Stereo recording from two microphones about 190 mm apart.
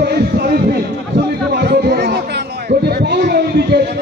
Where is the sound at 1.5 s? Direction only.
55° right (ahead or behind).